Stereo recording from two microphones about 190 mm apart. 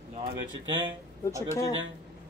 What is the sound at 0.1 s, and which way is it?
Speech, 25° right (ahead or behind).